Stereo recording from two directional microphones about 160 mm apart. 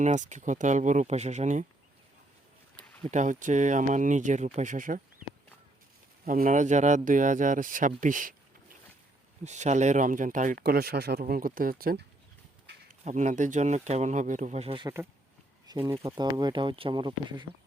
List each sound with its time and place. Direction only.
0.0 s speech: 50° right (ahead or behind)
3.0 s speech: 50° right (ahead or behind)
6.2 s speech: 60° right (ahead or behind)
9.4 s speech: 45° right (ahead or behind)
10.6 s speech: 75° right (ahead or behind)
12.9 s speech: 50° right (ahead or behind)
15.7 s speech: 25° right (ahead or behind)